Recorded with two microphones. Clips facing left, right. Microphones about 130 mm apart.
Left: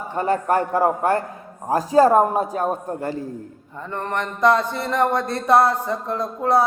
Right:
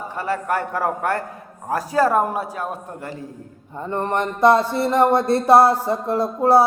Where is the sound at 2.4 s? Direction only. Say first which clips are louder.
Left 5 dB; 35° left (ahead or behind).